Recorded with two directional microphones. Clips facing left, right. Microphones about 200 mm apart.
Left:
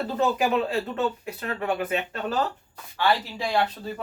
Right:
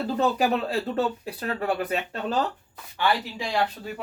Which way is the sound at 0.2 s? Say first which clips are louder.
Left 1 dB; 35° right (ahead or behind).